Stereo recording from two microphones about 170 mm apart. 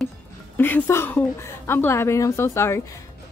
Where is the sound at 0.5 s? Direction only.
10° left (ahead or behind).